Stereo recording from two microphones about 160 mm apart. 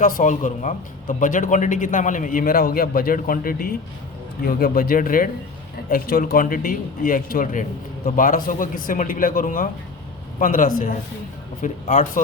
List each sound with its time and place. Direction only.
0.0 s a man's voice: 55° left (ahead or behind)